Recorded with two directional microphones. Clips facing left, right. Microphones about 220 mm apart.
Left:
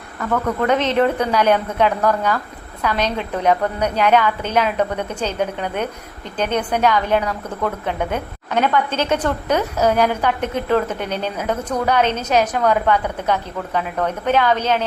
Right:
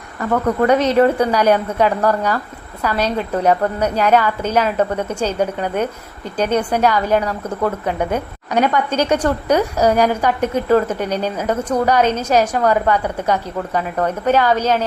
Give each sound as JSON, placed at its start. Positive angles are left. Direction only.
{"t": 0.2, "sound": "a woman's voice", "side_deg": -10}